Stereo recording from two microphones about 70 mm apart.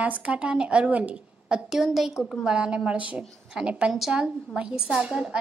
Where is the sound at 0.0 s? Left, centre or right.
Right; by 2.1 s centre.